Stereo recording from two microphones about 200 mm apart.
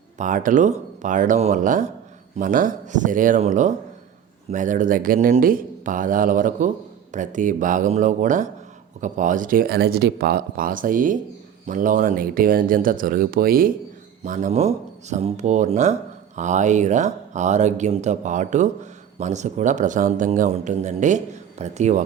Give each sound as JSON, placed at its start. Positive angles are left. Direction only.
{"t": 0.2, "sound": "speech", "side_deg": -40}